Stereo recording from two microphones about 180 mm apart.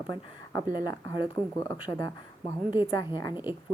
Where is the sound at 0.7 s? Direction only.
25° left (ahead or behind).